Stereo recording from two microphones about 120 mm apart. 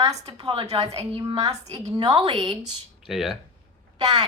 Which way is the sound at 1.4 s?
30° right (ahead or behind).